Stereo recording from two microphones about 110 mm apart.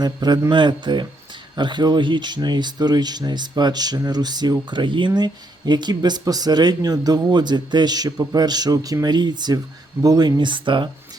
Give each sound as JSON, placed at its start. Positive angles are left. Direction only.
{"t": 0.0, "sound": "speech", "side_deg": -40}